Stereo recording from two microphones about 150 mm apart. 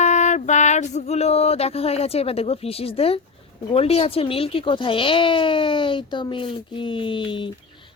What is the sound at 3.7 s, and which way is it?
Speech, 40° left (ahead or behind).